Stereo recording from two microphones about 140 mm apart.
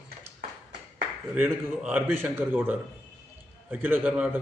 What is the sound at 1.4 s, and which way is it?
A man's voice, 15° right (ahead or behind).